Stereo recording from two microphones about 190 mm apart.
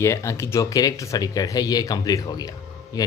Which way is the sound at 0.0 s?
15° left (ahead or behind).